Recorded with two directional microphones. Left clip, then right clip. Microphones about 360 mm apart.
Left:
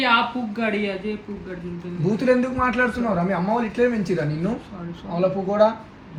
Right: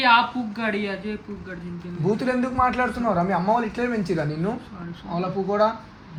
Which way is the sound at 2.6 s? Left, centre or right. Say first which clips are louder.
Right 2 dB; centre.